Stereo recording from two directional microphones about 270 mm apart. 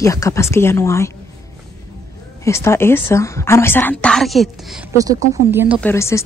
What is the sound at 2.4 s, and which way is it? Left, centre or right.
Speech, centre.